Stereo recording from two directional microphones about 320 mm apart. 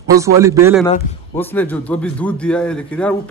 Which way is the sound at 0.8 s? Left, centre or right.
Centre.